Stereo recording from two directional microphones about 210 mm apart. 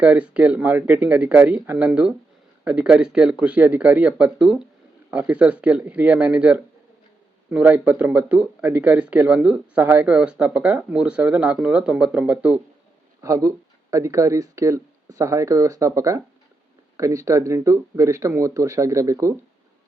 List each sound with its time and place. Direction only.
0.0 s speech: 5° right (ahead or behind)